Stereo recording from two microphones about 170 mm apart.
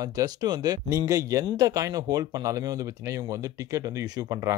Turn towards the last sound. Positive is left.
turn(degrees=-20)  # may be behind; listen again after turning